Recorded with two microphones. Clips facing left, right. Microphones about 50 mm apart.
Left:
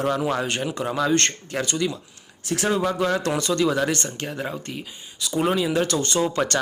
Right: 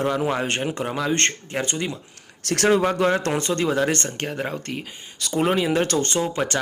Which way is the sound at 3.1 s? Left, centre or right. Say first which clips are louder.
Right 1 dB; right.